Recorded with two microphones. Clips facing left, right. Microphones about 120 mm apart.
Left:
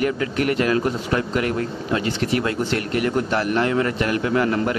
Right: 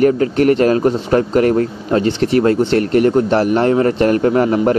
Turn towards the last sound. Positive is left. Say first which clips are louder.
# right 8 dB
turn(degrees=-40)  # may be behind; listen again after turning